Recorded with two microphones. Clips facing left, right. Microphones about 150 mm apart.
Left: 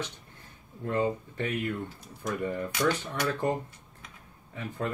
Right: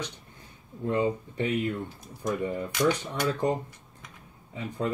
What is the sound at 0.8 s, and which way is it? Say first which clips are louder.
Speech: right 2 dB; 15° right (ahead or behind).